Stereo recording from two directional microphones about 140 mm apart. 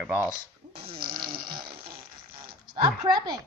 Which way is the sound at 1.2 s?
35° right (ahead or behind).